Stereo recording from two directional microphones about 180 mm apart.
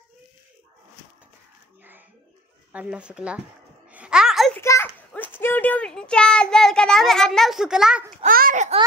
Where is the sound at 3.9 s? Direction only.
5° right (ahead or behind).